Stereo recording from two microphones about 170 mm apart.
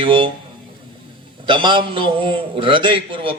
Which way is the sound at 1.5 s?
30° right (ahead or behind).